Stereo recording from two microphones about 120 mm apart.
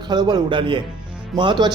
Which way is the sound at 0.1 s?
35° right (ahead or behind).